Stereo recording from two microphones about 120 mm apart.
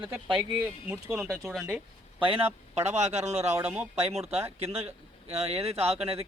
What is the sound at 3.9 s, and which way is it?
A man's voice, 60° right (ahead or behind).